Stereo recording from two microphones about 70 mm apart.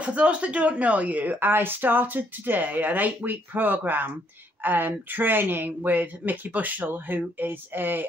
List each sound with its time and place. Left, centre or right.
0.0 s a woman's voice: centre